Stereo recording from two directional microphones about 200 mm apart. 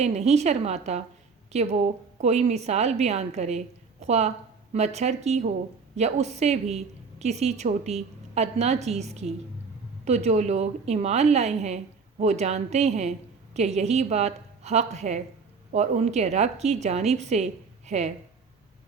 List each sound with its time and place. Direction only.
0.0 s a woman's voice: 35° right (ahead or behind)